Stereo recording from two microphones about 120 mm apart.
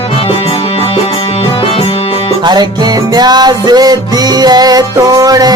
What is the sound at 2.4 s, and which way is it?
Music, 35° right (ahead or behind).